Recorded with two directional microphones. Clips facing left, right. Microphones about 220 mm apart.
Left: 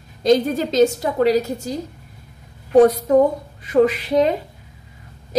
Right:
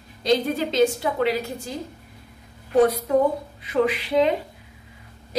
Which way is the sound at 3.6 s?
45° left (ahead or behind).